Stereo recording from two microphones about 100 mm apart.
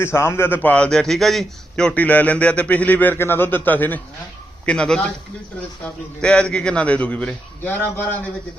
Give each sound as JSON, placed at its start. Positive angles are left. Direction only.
{"t": 0.0, "sound": "a man's voice", "side_deg": 25}
{"t": 6.2, "sound": "a man's voice", "side_deg": 10}